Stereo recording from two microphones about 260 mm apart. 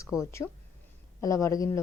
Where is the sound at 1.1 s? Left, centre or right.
Centre.